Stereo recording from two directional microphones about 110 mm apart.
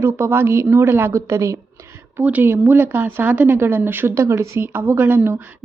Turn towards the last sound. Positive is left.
turn(degrees=-15)  # may be behind; listen again after turning